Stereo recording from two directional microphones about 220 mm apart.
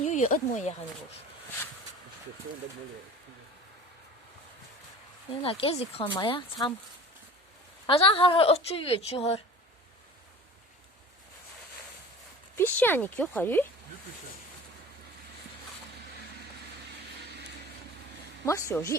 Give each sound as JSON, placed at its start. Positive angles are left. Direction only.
{"t": 0.0, "sound": "speech", "side_deg": 35}
{"t": 5.4, "sound": "a woman's voice", "side_deg": 25}
{"t": 7.9, "sound": "a woman's voice", "side_deg": 25}
{"t": 12.5, "sound": "speech", "side_deg": 10}
{"t": 18.4, "sound": "speech", "side_deg": 15}